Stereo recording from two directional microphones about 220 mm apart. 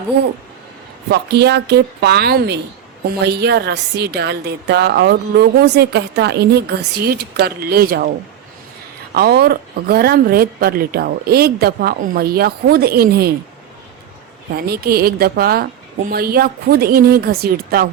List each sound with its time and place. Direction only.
1.1 s a woman's voice: 50° right (ahead or behind)
9.1 s a woman's voice: 45° right (ahead or behind)
14.5 s a woman's voice: 45° right (ahead or behind)